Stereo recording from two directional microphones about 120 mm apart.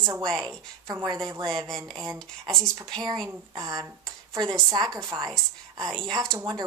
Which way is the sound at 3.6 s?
30° right (ahead or behind).